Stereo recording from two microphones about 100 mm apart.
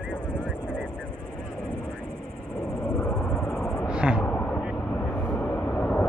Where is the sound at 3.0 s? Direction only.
5° left (ahead or behind).